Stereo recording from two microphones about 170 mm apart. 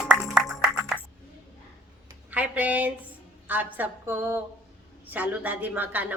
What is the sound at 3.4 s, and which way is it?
A woman's voice, 10° right (ahead or behind).